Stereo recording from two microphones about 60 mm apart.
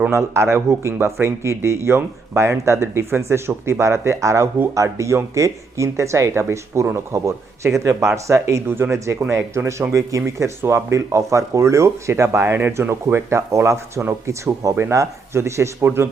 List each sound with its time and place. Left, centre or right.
0.1 s speech: right
8.7 s speech: right
9.3 s speech: right
12.5 s speech: right
12.9 s speech: right
14.3 s speech: right